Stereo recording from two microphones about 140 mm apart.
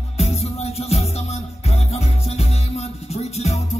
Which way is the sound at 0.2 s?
50° left (ahead or behind).